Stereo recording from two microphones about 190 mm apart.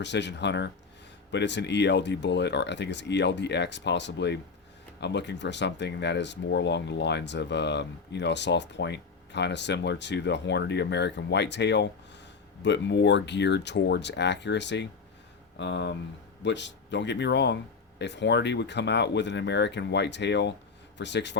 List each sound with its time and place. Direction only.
0.0 s speech: 65° left (ahead or behind)